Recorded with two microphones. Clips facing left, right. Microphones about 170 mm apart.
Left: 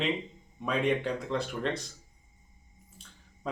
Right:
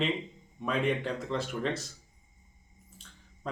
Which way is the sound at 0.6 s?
Centre (ahead or behind).